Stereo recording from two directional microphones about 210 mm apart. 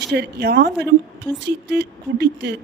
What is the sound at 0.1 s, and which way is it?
Speech, 50° right (ahead or behind).